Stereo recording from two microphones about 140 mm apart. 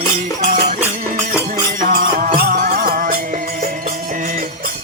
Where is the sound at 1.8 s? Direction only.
85° right.